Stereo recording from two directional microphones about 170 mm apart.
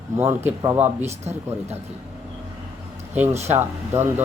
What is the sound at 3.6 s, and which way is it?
Speech, 10° right (ahead or behind).